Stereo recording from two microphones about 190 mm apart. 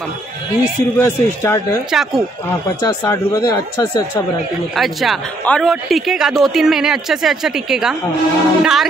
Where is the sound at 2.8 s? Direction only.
20° left (ahead or behind).